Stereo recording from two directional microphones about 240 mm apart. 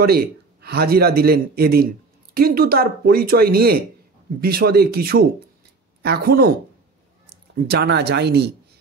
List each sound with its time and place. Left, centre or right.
0.0 s a man's voice: right
7.6 s speech: right